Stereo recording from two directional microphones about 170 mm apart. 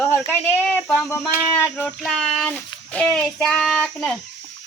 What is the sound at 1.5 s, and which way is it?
Child singing, 10° left (ahead or behind).